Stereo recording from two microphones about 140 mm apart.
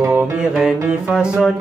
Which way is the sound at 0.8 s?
5° right (ahead or behind).